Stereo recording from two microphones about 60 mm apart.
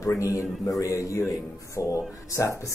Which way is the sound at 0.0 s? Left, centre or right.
Left.